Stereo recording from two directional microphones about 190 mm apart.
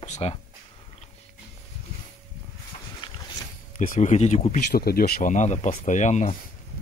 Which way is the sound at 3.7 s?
45° left (ahead or behind).